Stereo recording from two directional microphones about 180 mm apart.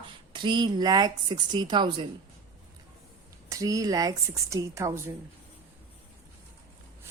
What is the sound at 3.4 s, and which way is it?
A woman's voice, 20° right (ahead or behind).